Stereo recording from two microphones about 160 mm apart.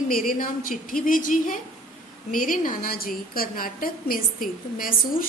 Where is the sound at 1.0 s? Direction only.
55° left (ahead or behind).